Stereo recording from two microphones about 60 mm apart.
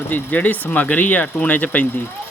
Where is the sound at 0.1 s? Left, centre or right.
Left.